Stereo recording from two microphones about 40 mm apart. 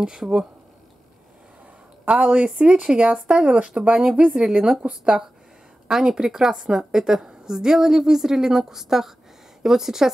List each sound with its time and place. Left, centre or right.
0.2 s speech: right
2.0 s a woman's voice: right; by 10.1 s centre